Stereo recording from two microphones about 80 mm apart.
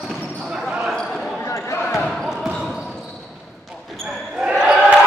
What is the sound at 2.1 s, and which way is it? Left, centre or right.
Basketball bounce, centre.